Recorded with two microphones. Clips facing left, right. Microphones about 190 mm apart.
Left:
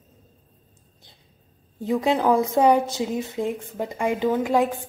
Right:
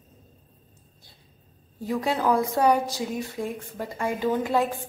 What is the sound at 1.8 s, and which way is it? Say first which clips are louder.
A woman's voice: left 4 dB; 20° left (ahead or behind).